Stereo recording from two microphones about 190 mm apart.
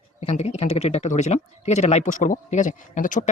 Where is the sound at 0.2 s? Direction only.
35° left (ahead or behind).